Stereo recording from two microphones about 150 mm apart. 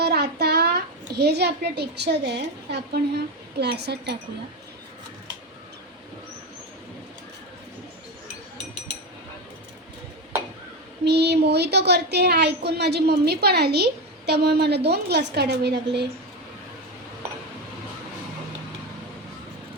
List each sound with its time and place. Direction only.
0.0 s a child's voice: 90° right
11.0 s a woman's voice: 90° right